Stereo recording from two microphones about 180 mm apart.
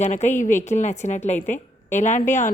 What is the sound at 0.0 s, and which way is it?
A woman's voice, 40° left (ahead or behind).